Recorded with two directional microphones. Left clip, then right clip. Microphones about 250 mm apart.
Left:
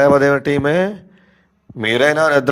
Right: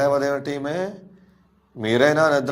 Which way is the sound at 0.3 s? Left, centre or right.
Left.